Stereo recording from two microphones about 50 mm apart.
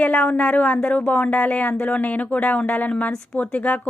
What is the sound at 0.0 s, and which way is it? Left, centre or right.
A woman's voice, left.